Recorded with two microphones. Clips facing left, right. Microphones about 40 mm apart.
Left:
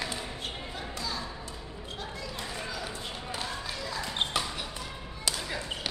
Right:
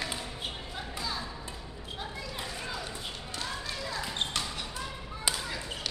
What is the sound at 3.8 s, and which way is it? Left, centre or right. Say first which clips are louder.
Basketball bounce: even; centre.